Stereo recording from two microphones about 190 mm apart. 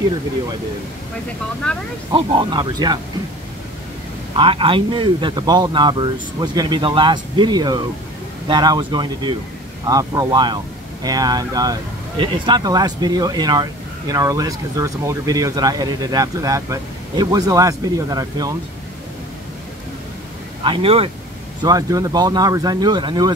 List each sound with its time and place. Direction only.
1.6 s speech: 5° left (ahead or behind)
2.1 s speech: 25° right (ahead or behind)
4.4 s speech: 30° right (ahead or behind)
20.6 s speech: 30° right (ahead or behind)
21.5 s speech: 20° right (ahead or behind)